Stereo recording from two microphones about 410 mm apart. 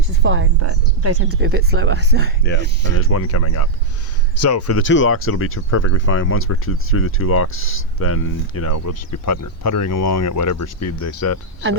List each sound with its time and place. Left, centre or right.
0.2 s speech: right
3.0 s speech: left